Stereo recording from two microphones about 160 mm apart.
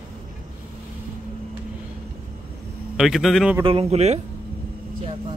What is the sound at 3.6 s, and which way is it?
Speech, 35° right (ahead or behind).